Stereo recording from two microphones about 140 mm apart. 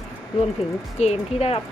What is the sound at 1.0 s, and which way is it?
Speech, 45° left (ahead or behind).